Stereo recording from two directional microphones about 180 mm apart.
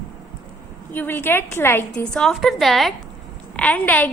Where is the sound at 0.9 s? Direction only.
10° left (ahead or behind).